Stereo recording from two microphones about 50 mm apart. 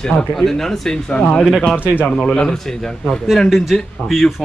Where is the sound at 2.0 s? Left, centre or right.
Centre.